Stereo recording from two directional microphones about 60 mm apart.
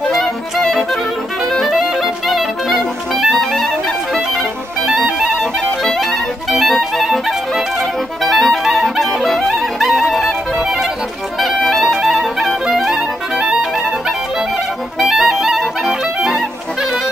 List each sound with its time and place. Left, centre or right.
0.1 s music: centre
1.5 s clarinet: centre
4.8 s music: centre
5.9 s clarinet: centre
11.3 s music: centre
11.9 s clarinet: centre
13.4 s music: centre
15.0 s clarinet: centre